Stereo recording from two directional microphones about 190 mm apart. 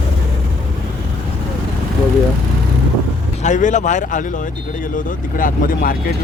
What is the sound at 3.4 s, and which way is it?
Speech, 40° left (ahead or behind).